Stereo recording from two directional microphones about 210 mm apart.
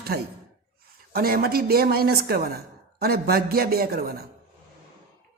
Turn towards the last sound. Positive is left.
turn(degrees=-45)  # may be behind; listen again after turning